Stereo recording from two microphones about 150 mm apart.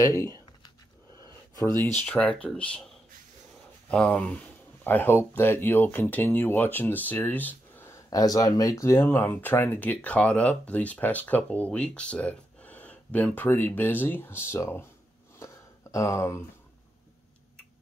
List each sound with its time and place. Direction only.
0.0 s speech: 20° left (ahead or behind)
2.0 s speech: 5° left (ahead or behind)
3.9 s speech: 10° left (ahead or behind)
15.3 s a sound: 20° left (ahead or behind)